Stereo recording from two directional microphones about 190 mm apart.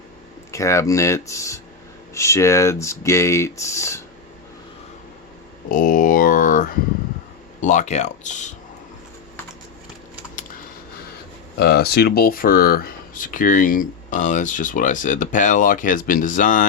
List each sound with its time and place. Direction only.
0.5 s speech: 15° left (ahead or behind)
5.6 s speech: 45° left (ahead or behind)
11.5 s speech: 55° left (ahead or behind)